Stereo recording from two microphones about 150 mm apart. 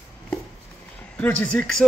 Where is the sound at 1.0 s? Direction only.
10° left (ahead or behind).